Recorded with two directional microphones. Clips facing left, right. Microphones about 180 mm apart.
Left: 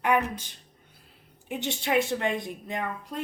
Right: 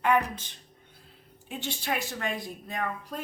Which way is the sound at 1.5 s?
20° left (ahead or behind).